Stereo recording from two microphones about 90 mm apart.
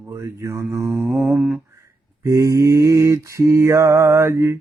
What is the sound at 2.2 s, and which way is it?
Mantra, 35° right (ahead or behind).